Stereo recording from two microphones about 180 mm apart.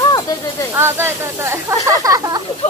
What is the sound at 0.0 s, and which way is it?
Snake, 20° left (ahead or behind).